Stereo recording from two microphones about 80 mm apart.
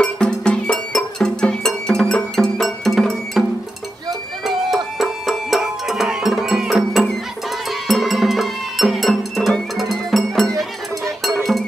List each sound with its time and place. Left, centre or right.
0.0 s music: centre
4.9 s music: centre